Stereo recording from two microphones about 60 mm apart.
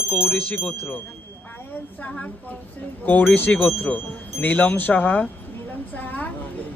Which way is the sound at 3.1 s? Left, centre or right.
Left.